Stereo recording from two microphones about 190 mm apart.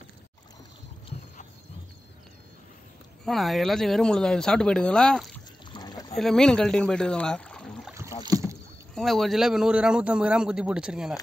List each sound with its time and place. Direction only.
3.3 s speech: centre (ahead or behind)
5.7 s a sound: 20° left (ahead or behind)
6.1 s speech: centre (ahead or behind)
8.2 s rowboat: 20° right (ahead or behind)
8.9 s speech: centre (ahead or behind)